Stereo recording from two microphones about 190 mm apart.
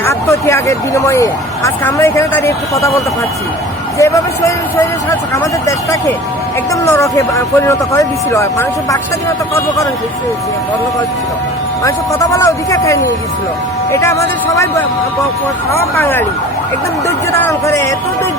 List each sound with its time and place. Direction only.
0.0 s speech: 15° left (ahead or behind)
3.9 s speech: 15° left (ahead or behind)
11.8 s speech: 15° left (ahead or behind)
16.0 s speech: 10° left (ahead or behind)